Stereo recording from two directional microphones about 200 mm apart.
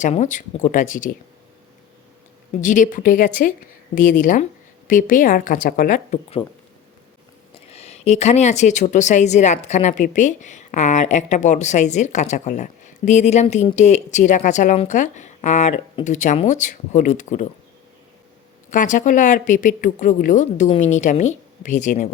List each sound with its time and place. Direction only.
0.0 s speech: 35° left (ahead or behind)
2.5 s speech: 40° left (ahead or behind)
7.7 s speech: 35° left (ahead or behind)
18.7 s speech: 40° left (ahead or behind)